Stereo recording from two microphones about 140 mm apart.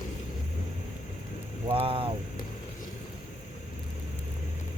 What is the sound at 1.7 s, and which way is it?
Speech, 40° right (ahead or behind).